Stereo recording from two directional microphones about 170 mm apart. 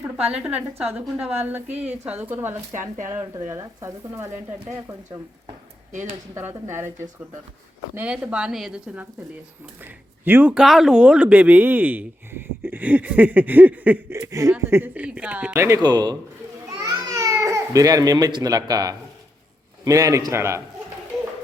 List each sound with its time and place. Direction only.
0.0 s speech: 5° right (ahead or behind)
6.0 s speech: 15° right (ahead or behind)
7.9 s speech: 5° right (ahead or behind); by 16.1 s 25° right (ahead or behind)
16.7 s babbling: 20° right (ahead or behind)
19.8 s a man's voice: 20° right (ahead or behind)